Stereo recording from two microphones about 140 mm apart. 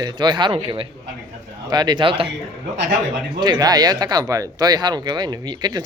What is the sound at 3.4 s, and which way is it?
Speech, 30° right (ahead or behind).